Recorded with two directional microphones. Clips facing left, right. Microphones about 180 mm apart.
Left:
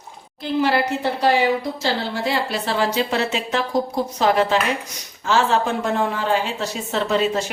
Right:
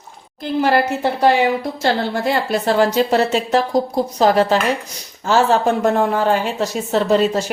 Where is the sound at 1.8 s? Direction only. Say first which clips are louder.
Right 4 dB; 50° right (ahead or behind).